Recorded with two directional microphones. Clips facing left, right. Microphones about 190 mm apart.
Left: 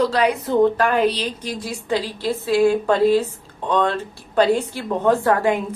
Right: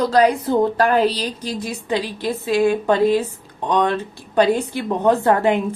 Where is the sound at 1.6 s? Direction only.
20° right (ahead or behind).